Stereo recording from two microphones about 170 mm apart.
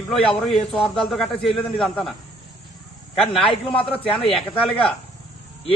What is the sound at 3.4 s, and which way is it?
A man's voice, 30° left (ahead or behind).